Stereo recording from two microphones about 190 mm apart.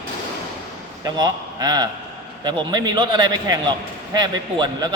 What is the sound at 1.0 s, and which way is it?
A man's voice, 20° right (ahead or behind).